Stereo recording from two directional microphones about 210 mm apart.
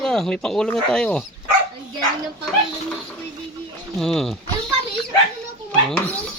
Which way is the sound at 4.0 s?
Centre (ahead or behind).